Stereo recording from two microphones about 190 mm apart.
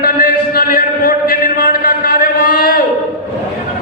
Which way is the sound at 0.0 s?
50° left (ahead or behind).